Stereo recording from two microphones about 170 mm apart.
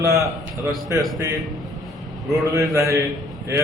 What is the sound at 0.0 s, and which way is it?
Speech, 20° right (ahead or behind).